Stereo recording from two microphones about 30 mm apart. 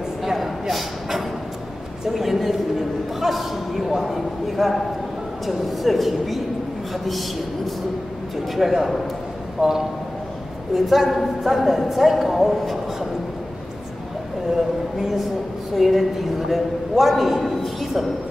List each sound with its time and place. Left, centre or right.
0.2 s a sound: centre
2.1 s a man's voice: centre
8.6 s a man's voice: centre
10.7 s a man's voice: centre
15.0 s a man's voice: centre